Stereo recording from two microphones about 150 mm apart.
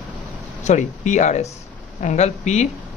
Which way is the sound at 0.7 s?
55° left (ahead or behind).